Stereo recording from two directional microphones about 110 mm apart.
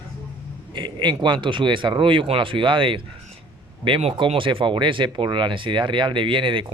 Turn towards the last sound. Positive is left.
turn(degrees=-50)  # may be behind; listen again after turning